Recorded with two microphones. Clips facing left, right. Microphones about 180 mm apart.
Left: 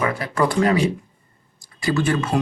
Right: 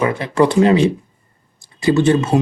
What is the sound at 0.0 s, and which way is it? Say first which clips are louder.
Speech: right 6 dB; 25° right (ahead or behind).